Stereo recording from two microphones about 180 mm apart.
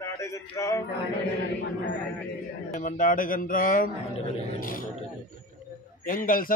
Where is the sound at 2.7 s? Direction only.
50° left (ahead or behind).